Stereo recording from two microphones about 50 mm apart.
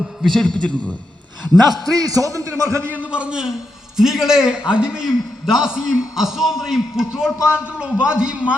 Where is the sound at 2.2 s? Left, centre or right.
Right.